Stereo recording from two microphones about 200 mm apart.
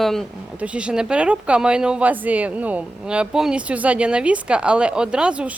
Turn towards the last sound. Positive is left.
turn(degrees=-5)  # may be behind; listen again after turning